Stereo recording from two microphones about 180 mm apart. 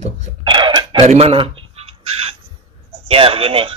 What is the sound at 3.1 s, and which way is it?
Speech, 30° right (ahead or behind).